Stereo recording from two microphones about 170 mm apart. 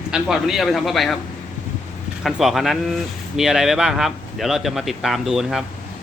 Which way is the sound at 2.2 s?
Centre (ahead or behind).